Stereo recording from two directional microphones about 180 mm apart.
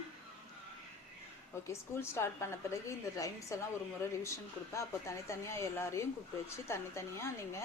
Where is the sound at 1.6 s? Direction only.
15° left (ahead or behind).